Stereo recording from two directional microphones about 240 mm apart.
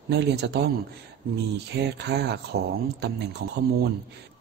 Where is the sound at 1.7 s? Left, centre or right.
Right.